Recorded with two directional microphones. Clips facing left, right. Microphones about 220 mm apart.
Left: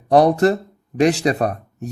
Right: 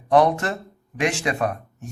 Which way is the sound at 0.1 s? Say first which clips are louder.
Left 5 dB; 35° left (ahead or behind).